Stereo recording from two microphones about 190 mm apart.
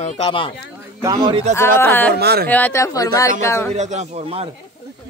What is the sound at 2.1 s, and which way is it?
Speech, 55° right (ahead or behind).